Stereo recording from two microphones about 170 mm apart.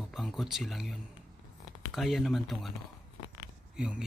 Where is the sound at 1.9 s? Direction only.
Centre (ahead or behind).